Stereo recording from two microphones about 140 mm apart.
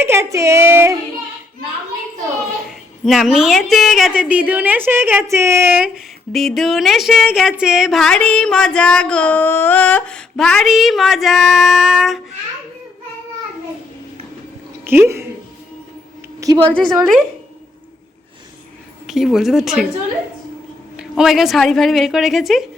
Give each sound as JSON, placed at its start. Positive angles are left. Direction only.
{"t": 0.0, "sound": "speech", "side_deg": -20}
{"t": 2.6, "sound": "a woman's voice", "side_deg": 0}
{"t": 6.3, "sound": "a woman's voice", "side_deg": 0}
{"t": 14.8, "sound": "a woman's voice", "side_deg": -15}
{"t": 16.6, "sound": "a woman's voice", "side_deg": 5}
{"t": 19.0, "sound": "a woman's voice", "side_deg": 0}
{"t": 20.9, "sound": "a woman's voice", "side_deg": -5}